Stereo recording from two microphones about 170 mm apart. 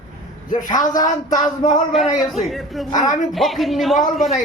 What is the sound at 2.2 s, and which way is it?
Speech, centre (ahead or behind).